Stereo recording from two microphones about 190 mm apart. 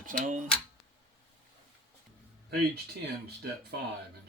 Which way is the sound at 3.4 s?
60° right (ahead or behind).